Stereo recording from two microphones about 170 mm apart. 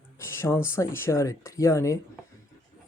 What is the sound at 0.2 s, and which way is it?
Speech, 15° left (ahead or behind).